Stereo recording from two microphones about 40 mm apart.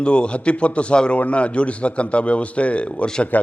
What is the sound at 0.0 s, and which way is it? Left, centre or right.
A man's voice, left.